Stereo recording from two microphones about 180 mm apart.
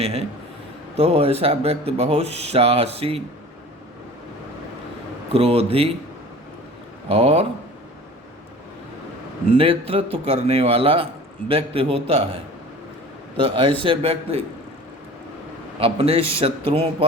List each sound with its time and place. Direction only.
0.9 s a man's voice: 35° right (ahead or behind)
5.3 s a man's voice: 35° right (ahead or behind)
7.1 s a man's voice: 35° right (ahead or behind)
9.5 s a man's voice: 30° right (ahead or behind)
13.3 s a man's voice: 30° right (ahead or behind)
15.8 s a man's voice: 30° right (ahead or behind)